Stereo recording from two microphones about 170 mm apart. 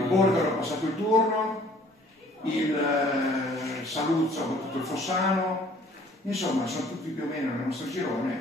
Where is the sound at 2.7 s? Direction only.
Centre (ahead or behind).